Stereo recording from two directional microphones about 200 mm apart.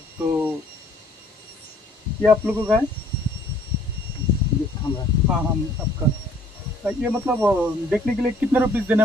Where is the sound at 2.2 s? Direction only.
10° right (ahead or behind).